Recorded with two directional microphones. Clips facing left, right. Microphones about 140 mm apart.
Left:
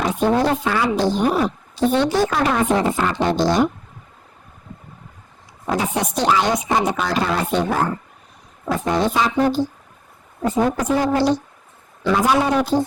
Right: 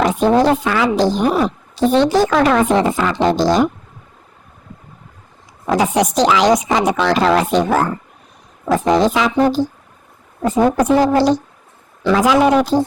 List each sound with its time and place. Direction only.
0.0 s a woman's voice: 90° right
5.6 s a woman's voice: 90° right